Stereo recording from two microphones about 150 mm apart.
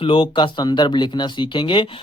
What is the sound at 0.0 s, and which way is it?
Speech, 35° left (ahead or behind).